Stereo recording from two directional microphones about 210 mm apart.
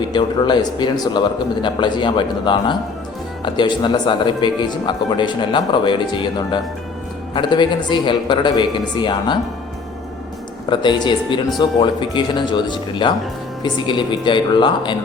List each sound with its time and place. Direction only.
0.0 s speech: 20° left (ahead or behind)
10.7 s speech: 20° left (ahead or behind)